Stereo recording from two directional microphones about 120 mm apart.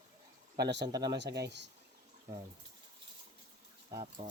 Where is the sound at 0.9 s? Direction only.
35° right (ahead or behind).